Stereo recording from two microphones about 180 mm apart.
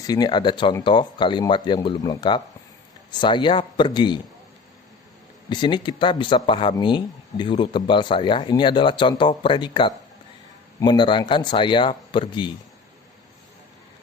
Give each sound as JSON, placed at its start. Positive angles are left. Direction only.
{"t": 0.0, "sound": "speech", "side_deg": 20}
{"t": 5.5, "sound": "speech", "side_deg": 25}